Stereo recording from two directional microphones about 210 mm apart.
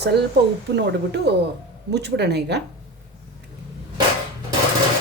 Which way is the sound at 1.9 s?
55° right (ahead or behind).